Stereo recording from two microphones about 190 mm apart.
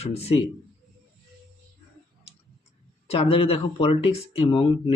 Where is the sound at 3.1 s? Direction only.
30° left (ahead or behind).